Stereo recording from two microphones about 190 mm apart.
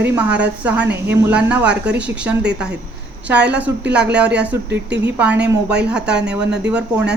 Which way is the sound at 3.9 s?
5° right (ahead or behind).